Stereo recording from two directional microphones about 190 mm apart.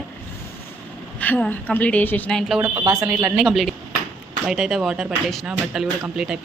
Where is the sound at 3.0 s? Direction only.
5° right (ahead or behind).